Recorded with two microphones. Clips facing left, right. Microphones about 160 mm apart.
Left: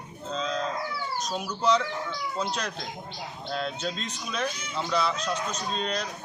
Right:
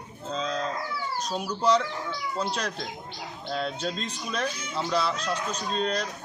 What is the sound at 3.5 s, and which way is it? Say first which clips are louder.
A man's voice: right 1 dB; centre (ahead or behind).